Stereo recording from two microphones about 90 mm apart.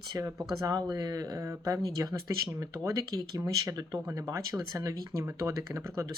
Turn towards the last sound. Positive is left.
turn(degrees=-35)  # may be behind; listen again after turning